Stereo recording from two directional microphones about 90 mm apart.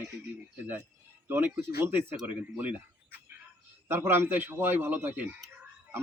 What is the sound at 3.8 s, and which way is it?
Speech, 25° right (ahead or behind).